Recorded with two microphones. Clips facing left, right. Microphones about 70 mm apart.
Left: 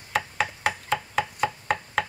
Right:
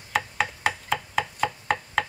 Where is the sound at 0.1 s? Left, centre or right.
Centre.